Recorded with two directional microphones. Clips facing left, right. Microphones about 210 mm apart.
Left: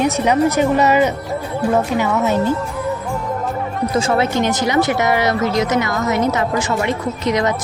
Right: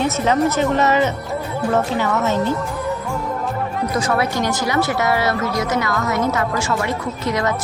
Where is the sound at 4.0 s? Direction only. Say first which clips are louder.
Left 4 dB; 25° left (ahead or behind).